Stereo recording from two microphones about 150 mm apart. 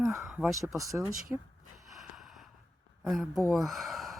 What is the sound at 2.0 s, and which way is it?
Snort, centre (ahead or behind).